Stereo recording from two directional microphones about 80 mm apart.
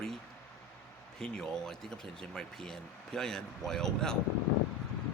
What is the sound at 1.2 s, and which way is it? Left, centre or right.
Speech, centre.